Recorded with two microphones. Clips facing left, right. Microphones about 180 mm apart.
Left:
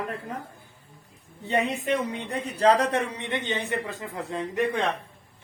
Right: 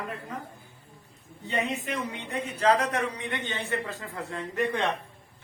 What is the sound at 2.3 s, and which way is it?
A man's voice, 35° left (ahead or behind).